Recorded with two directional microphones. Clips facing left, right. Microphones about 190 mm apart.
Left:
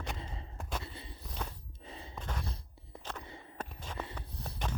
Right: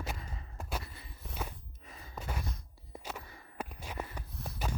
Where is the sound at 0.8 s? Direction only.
25° left (ahead or behind).